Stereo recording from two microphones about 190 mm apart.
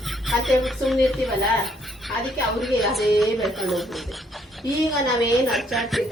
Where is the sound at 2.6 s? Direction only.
Centre (ahead or behind).